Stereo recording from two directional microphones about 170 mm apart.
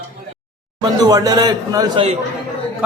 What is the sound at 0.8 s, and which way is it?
A man's voice, 20° right (ahead or behind).